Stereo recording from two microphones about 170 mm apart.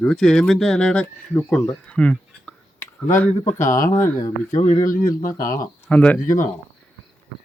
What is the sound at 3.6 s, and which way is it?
Speech, 55° left (ahead or behind).